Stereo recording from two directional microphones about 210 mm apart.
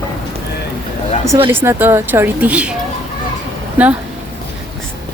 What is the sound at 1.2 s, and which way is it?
Speech, 25° right (ahead or behind).